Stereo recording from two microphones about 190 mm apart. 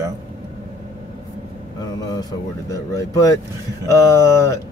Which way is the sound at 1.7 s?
20° left (ahead or behind).